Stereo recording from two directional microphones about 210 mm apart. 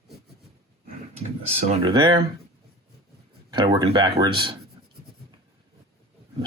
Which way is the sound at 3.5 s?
20° right (ahead or behind).